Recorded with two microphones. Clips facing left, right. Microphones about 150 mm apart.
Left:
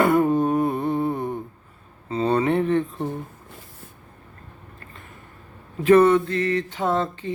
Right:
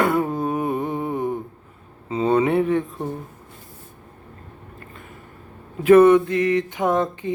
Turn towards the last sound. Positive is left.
turn(degrees=-15)  # may be behind; listen again after turning